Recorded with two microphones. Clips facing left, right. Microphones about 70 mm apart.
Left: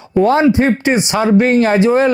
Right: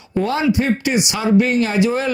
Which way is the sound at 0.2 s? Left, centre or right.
Left.